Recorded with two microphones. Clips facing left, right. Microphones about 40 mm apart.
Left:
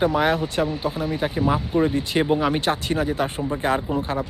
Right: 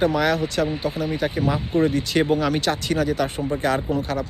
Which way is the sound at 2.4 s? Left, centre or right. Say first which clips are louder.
Even; left.